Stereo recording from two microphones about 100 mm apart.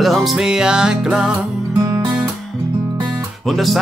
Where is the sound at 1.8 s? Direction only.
30° right (ahead or behind).